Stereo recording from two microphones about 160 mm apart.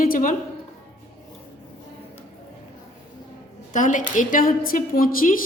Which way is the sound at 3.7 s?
50° left (ahead or behind).